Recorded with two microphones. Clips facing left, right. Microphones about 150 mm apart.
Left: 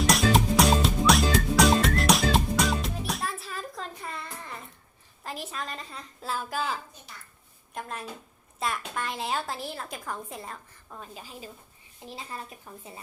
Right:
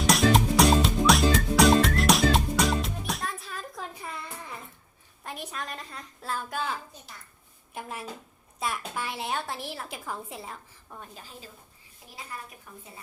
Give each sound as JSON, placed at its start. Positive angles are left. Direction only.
{"t": 0.0, "sound": "music", "side_deg": 0}
{"t": 5.2, "sound": "a woman's voice", "side_deg": 0}
{"t": 11.1, "sound": "a woman's voice", "side_deg": 10}
{"t": 12.0, "sound": "a woman's voice", "side_deg": 25}